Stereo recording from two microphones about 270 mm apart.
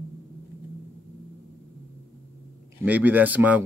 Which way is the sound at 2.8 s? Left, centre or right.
Centre.